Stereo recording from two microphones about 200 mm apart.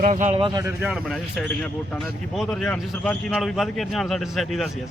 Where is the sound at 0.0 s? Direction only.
35° right (ahead or behind).